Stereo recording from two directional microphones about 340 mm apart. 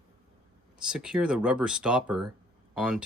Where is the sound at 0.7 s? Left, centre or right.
Centre.